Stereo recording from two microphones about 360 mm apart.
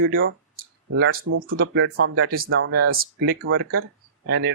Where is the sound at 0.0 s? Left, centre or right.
Right.